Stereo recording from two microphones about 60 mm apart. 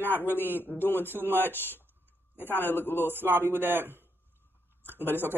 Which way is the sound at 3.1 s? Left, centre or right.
Right.